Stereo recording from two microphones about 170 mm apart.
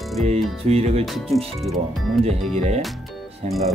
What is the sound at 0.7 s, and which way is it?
Speech, 35° right (ahead or behind).